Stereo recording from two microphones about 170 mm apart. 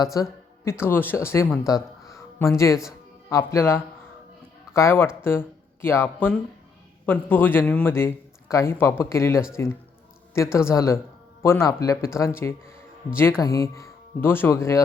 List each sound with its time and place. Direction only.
0.0 s speech: 20° left (ahead or behind)